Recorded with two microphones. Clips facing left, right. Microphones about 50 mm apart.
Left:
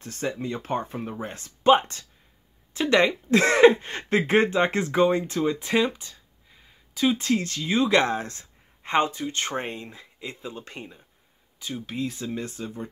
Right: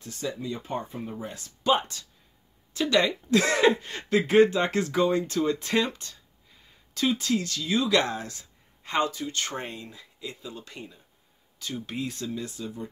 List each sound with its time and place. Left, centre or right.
0.0 s speech: left
1.1 s speech: left
5.3 s speech: centre
6.9 s a sound: centre
7.2 s speech: left
11.8 s speech: centre
12.3 s speech: left